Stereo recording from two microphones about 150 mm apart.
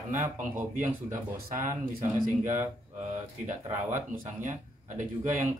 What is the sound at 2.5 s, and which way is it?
Speech, 15° right (ahead or behind).